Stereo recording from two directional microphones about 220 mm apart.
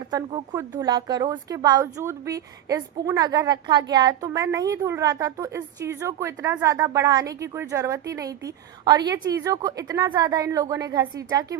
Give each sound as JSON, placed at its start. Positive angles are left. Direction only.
{"t": 0.1, "sound": "a woman's voice", "side_deg": -20}